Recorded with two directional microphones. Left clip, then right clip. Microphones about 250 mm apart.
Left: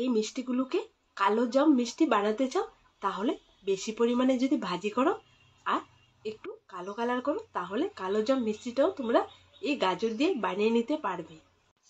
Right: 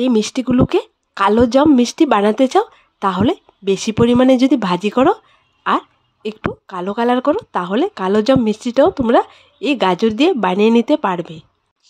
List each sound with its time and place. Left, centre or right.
0.0 s a woman's voice: right